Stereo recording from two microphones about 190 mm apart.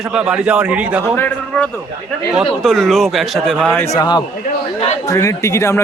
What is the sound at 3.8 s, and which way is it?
Speech, 20° left (ahead or behind).